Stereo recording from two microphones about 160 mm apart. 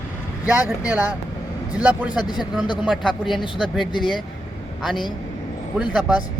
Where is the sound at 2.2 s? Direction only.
25° left (ahead or behind).